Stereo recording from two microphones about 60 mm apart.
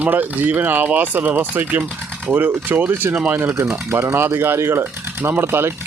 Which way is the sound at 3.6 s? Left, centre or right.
Right.